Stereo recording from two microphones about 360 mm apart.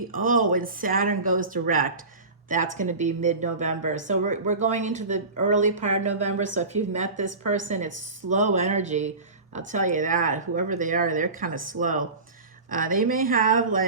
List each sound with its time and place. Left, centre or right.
0.1 s speech: right
8.3 s speech: centre